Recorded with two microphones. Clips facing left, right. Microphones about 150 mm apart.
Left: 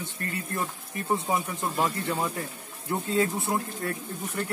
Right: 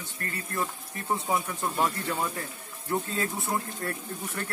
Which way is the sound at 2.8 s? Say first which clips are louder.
Left 4 dB; 20° left (ahead or behind).